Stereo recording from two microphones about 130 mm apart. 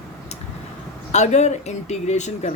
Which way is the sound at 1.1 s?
60° left (ahead or behind).